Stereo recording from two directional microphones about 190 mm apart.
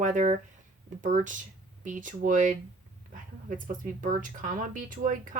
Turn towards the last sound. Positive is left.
turn(degrees=-45)  # may be behind; listen again after turning